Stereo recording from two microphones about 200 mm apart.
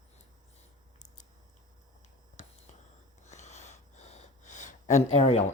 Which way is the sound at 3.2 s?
35° left (ahead or behind).